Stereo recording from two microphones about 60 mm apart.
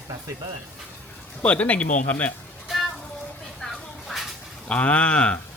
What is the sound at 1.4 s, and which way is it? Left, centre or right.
Speech, left.